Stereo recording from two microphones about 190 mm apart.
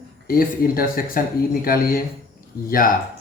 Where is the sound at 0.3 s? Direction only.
50° left (ahead or behind).